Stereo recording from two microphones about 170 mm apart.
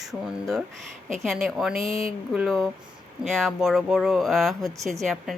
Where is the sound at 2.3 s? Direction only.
Centre (ahead or behind).